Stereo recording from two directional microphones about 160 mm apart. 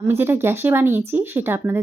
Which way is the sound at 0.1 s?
15° right (ahead or behind).